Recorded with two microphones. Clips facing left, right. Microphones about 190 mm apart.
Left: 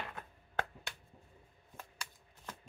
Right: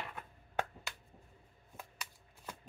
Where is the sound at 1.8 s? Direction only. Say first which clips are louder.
Even; 10° right (ahead or behind).